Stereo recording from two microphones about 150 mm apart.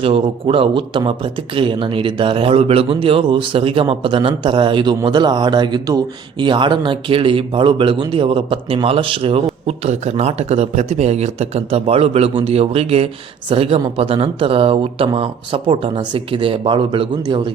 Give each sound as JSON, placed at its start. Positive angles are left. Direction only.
{"t": 0.0, "sound": "speech", "side_deg": -40}